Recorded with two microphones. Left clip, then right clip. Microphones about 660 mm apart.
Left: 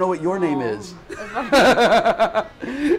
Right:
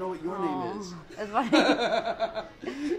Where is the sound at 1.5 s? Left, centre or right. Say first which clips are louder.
Left 11 dB; left.